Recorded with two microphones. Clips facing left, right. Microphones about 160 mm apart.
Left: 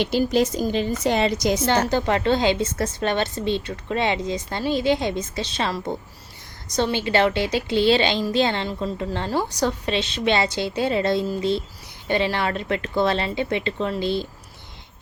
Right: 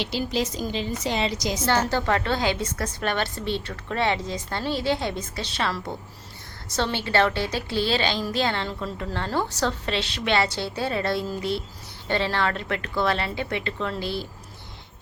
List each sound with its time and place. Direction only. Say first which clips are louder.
0.0 s a woman's voice: left 7 dB; 50° left (ahead or behind)
1.9 s a woman's voice: left 4 dB; 20° left (ahead or behind)